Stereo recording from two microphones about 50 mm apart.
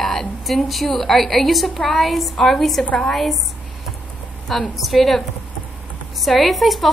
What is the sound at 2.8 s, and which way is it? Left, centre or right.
Speech, left.